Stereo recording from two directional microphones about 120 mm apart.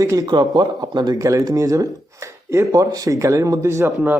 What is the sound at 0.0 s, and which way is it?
Speech, 30° right (ahead or behind).